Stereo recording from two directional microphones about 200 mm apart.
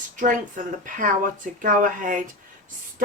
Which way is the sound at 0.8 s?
40° right (ahead or behind).